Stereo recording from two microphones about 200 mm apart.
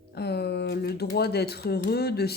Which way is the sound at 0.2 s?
55° left (ahead or behind).